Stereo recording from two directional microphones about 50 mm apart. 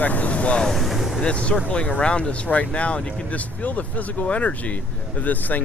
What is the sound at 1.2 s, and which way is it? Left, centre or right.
Speech, left.